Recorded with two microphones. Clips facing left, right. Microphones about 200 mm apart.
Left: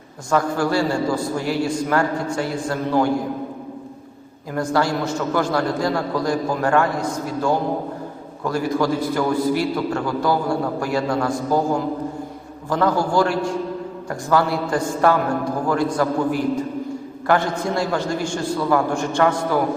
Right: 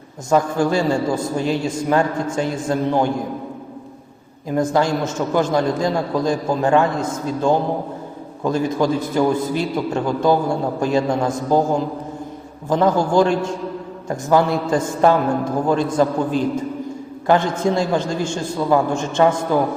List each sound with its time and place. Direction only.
0.3 s a man's voice: 20° right (ahead or behind)
4.4 s a man's voice: 20° right (ahead or behind)